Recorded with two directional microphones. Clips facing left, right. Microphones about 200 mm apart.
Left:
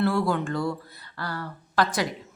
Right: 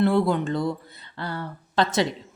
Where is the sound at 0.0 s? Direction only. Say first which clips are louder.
Right 3 dB; 20° right (ahead or behind).